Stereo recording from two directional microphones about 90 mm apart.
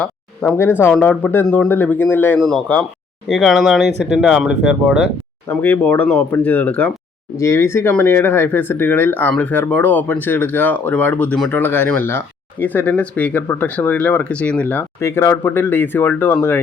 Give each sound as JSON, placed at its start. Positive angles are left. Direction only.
{"t": 0.0, "sound": "speech", "side_deg": 25}
{"t": 2.4, "sound": "speech", "side_deg": 10}
{"t": 3.3, "sound": "speech", "side_deg": 0}
{"t": 5.5, "sound": "speech", "side_deg": 20}
{"t": 7.3, "sound": "speech", "side_deg": 35}
{"t": 15.0, "sound": "speech", "side_deg": 30}